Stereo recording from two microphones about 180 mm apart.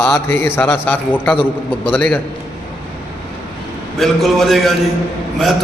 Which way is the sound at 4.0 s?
Centre (ahead or behind).